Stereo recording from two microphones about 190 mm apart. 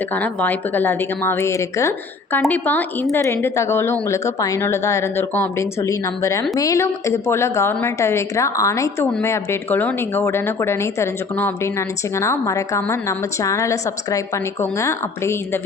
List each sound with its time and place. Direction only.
0.1 s a woman's voice: 10° left (ahead or behind)